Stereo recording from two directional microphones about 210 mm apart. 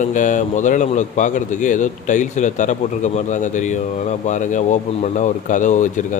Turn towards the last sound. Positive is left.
turn(degrees=35)  # may be behind; listen again after turning